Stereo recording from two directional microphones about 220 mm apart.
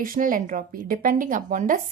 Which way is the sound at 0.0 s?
40° right (ahead or behind).